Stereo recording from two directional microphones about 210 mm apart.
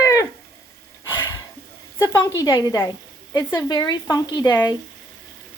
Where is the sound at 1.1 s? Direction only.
15° left (ahead or behind).